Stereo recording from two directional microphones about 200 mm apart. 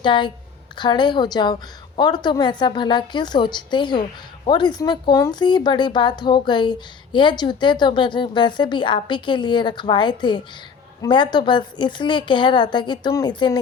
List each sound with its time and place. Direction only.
0.0 s speech: 25° left (ahead or behind)